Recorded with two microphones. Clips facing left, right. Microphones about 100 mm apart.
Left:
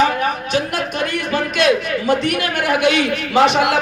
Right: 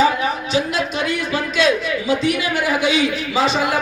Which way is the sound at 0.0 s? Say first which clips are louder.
Even; 55° left (ahead or behind).